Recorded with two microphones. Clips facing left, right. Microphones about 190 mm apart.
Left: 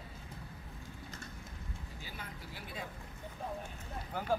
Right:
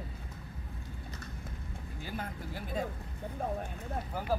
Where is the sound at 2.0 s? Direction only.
50° right (ahead or behind).